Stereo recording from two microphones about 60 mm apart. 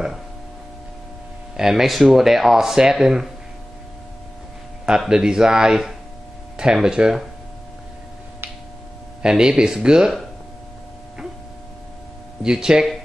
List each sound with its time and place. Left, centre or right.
1.6 s speech: centre
4.8 s speech: centre
9.2 s speech: centre
12.4 s speech: centre